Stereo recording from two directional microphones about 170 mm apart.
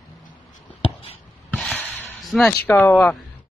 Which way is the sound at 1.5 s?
5° left (ahead or behind).